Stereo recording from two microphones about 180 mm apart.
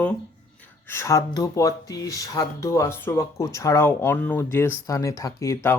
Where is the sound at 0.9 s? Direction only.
15° left (ahead or behind).